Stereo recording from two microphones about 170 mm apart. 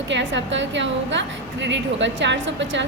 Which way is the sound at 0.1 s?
90° right.